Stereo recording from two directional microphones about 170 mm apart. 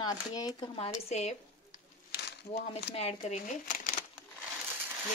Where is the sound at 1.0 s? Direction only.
40° left (ahead or behind).